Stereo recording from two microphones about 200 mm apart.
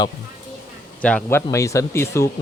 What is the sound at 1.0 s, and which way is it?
Speech, 5° left (ahead or behind).